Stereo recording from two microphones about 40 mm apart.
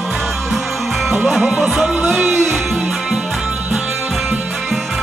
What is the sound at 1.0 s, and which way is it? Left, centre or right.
Music, centre.